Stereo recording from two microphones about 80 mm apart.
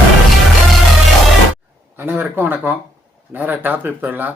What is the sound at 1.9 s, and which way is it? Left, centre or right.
A man's voice, right.